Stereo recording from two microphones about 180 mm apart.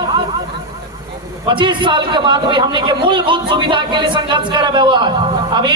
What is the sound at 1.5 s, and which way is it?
A man's voice, 25° right (ahead or behind).